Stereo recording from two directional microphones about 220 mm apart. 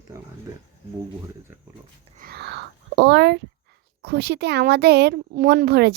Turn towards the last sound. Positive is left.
turn(degrees=-45)  # may be behind; listen again after turning